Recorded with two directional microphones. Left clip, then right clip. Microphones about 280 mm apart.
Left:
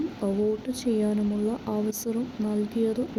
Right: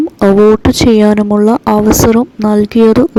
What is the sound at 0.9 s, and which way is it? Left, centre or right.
Speech, right.